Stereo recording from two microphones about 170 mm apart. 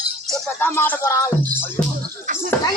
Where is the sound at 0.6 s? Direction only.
15° left (ahead or behind).